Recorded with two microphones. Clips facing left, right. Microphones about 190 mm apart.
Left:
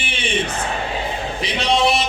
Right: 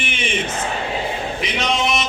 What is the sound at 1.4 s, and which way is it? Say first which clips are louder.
Male singing: left 4 dB; 35° left (ahead or behind).